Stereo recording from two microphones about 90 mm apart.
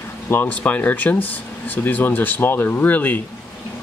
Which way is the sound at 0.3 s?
20° left (ahead or behind).